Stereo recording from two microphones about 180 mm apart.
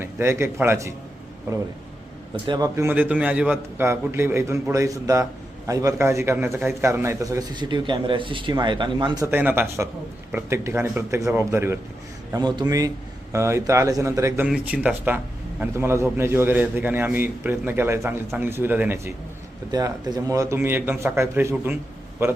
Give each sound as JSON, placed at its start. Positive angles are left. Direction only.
{"t": 0.0, "sound": "speech", "side_deg": -15}
{"t": 2.5, "sound": "a man's voice", "side_deg": -20}